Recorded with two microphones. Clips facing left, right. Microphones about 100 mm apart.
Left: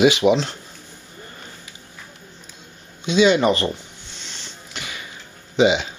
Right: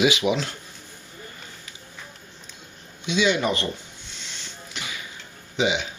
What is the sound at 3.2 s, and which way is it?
Speech, 90° left.